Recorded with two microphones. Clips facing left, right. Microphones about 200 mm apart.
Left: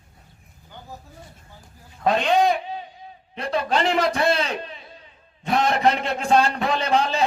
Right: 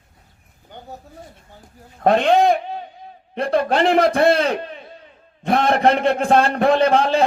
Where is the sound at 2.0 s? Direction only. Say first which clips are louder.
Right 4 dB; 50° right (ahead or behind).